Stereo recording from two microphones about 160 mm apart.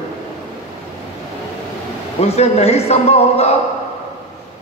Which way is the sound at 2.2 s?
40° left (ahead or behind).